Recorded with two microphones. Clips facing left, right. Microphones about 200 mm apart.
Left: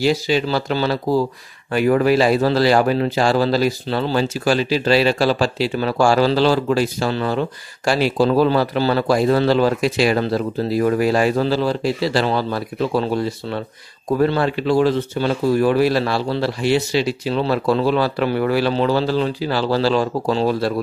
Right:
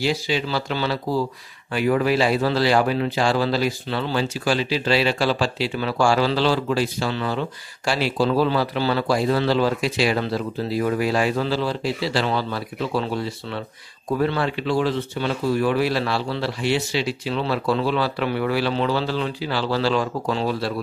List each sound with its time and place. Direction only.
0.0 s speech: 40° left (ahead or behind)